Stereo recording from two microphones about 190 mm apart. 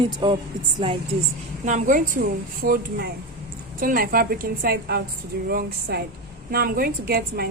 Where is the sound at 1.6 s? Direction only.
40° right (ahead or behind).